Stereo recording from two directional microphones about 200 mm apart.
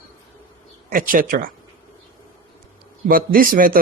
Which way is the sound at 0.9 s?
45° right (ahead or behind).